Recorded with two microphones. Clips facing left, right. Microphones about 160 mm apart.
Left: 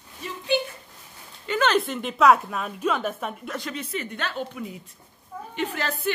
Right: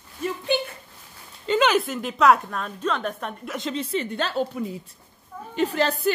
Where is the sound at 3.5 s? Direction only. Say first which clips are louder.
Right 4 dB; 25° right (ahead or behind).